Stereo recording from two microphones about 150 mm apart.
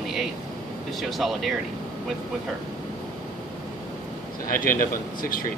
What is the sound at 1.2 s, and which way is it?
Speech, centre (ahead or behind).